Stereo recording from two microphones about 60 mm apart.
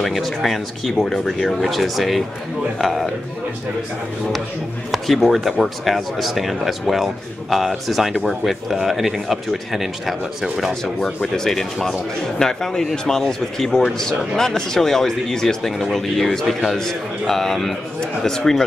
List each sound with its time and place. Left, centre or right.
0.0 s speech: centre
4.9 s a man's voice: centre